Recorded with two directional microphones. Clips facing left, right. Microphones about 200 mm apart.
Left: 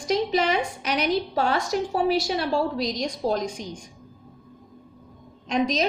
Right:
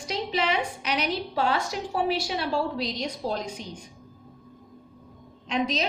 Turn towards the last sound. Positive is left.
turn(degrees=45)  # may be behind; listen again after turning